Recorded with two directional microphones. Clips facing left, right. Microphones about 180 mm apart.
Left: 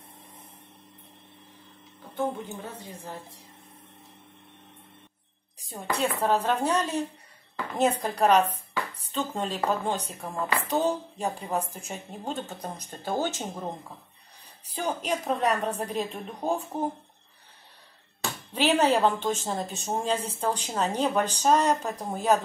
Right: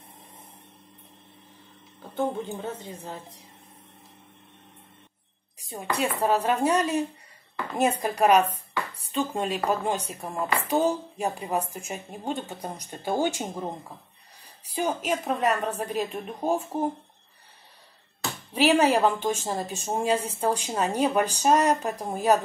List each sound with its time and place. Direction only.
2.5 s a woman's voice: 20° right (ahead or behind)
5.9 s a woman's voice: 10° right (ahead or behind)
18.5 s a woman's voice: 10° right (ahead or behind)